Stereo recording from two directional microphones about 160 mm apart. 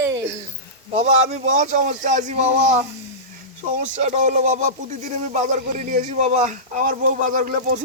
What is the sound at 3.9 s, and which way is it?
Speech, 45° right (ahead or behind).